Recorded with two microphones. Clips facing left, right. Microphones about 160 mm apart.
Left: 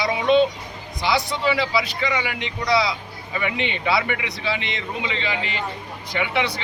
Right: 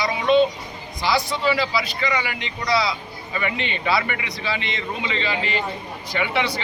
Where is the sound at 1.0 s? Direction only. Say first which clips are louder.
Even; 20° left (ahead or behind).